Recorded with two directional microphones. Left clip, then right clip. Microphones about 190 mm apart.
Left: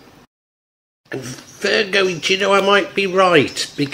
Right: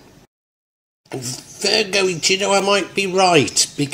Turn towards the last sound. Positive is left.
turn(degrees=-25)  # may be behind; listen again after turning